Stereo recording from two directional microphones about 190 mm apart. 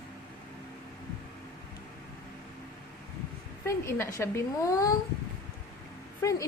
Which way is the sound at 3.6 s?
15° left (ahead or behind).